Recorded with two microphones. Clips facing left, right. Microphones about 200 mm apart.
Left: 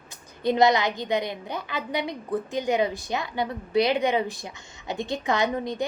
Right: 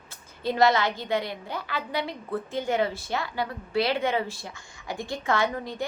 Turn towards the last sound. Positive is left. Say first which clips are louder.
# left 2 dB
turn(degrees=20)  # may be behind; listen again after turning